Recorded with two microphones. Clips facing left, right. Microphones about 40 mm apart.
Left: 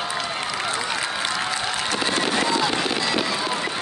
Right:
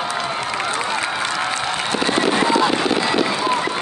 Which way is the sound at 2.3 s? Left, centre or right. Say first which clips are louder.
Right 7 dB; right.